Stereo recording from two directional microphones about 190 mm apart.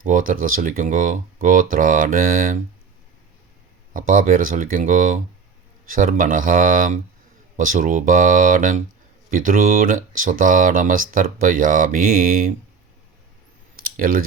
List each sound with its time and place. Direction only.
0.0 s speech: 45° right (ahead or behind)
3.9 s speech: 45° right (ahead or behind)
13.8 s speech: 50° right (ahead or behind)